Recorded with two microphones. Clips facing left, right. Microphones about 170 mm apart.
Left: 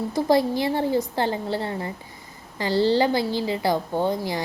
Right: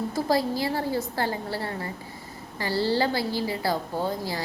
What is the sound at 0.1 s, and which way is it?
A woman's voice, 20° left (ahead or behind).